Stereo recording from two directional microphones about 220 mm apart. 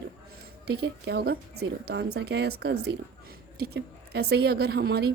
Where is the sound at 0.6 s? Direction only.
50° right (ahead or behind).